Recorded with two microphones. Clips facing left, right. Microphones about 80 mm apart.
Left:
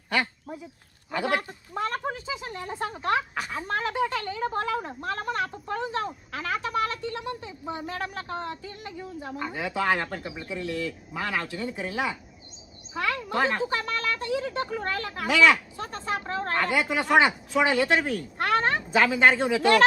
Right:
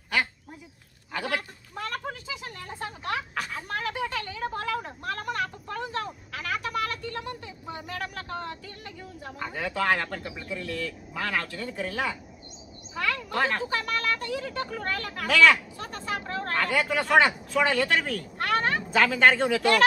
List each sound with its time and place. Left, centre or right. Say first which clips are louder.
1.1 s a sound: left 4 dB; left
9.4 s speech: even; centre
12.9 s a sound: left 1 dB; left
13.7 s speech: even; left
15.3 s speech: even; centre
15.8 s speech: left 2 dB; left
16.6 s speech: even; centre
18.9 s speech: even; centre